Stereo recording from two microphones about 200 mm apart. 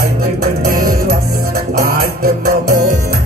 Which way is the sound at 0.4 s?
50° right (ahead or behind).